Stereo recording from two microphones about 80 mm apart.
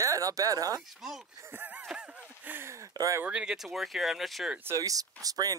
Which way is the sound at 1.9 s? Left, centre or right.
Centre.